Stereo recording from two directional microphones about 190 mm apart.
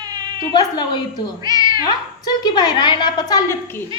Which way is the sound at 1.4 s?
20° right (ahead or behind).